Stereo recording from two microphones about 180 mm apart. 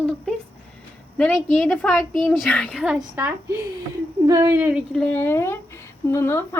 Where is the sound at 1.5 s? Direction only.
5° left (ahead or behind).